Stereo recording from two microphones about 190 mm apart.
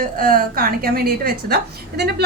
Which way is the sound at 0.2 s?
50° right (ahead or behind).